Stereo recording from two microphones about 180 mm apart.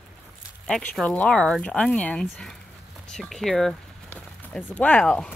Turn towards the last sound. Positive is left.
turn(degrees=5)  # may be behind; listen again after turning